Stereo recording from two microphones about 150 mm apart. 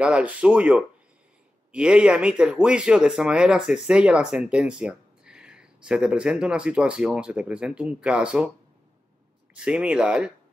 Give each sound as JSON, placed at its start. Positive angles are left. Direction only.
{"t": 0.0, "sound": "speech", "side_deg": -10}
{"t": 9.5, "sound": "speech", "side_deg": -10}